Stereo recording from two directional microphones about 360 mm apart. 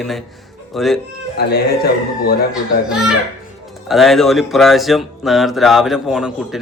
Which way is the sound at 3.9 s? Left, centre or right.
Centre.